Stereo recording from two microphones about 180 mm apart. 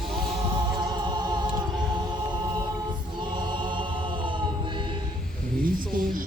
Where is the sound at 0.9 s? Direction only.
25° right (ahead or behind).